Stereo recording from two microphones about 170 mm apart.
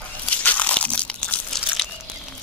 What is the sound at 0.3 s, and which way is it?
Crunch, 10° left (ahead or behind).